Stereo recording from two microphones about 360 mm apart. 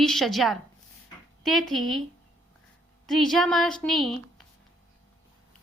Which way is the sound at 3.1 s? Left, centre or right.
Centre.